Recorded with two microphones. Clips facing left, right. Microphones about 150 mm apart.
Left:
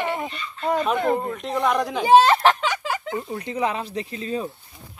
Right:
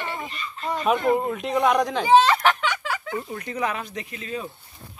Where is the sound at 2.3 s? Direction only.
30° left (ahead or behind).